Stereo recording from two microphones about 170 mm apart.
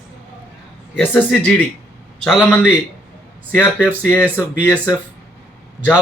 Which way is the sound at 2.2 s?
5° right (ahead or behind).